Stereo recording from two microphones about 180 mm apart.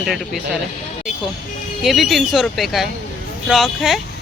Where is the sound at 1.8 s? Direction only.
Centre (ahead or behind).